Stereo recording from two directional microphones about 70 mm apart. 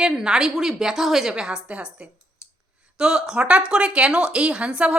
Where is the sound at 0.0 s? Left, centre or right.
Centre.